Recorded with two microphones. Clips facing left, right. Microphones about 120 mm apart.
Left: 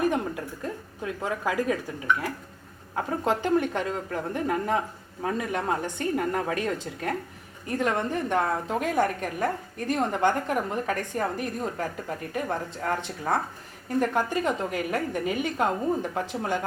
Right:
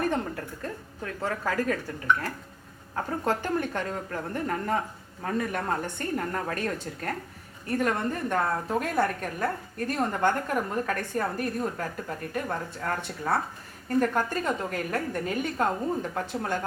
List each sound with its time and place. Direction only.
0.0 s a woman's voice: 10° left (ahead or behind)
2.9 s a woman's voice: 15° left (ahead or behind)